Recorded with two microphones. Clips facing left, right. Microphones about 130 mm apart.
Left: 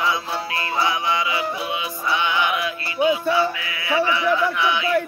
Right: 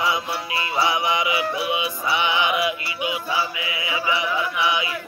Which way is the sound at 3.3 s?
15° right (ahead or behind).